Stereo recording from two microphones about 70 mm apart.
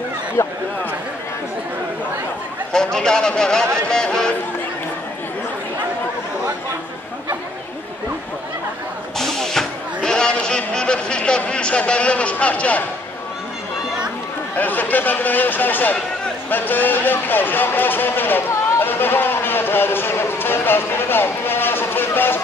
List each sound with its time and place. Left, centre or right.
0.4 s speech: left
2.7 s speech: centre
9.2 s a sound: centre
14.6 s speech: left